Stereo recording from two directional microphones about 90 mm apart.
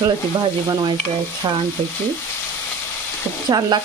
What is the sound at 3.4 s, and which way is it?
Stir, 50° right (ahead or behind).